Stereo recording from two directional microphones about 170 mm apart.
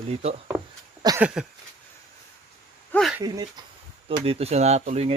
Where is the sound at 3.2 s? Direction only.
20° right (ahead or behind).